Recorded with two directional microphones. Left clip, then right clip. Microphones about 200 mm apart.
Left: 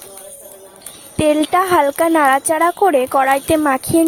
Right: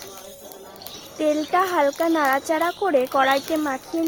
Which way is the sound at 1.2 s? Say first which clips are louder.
Left 6 dB; 45° left (ahead or behind).